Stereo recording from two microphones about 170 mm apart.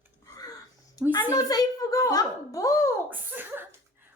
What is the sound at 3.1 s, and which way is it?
Cough, 10° right (ahead or behind).